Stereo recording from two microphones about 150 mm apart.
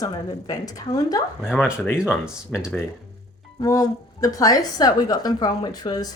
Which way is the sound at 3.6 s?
25° left (ahead or behind).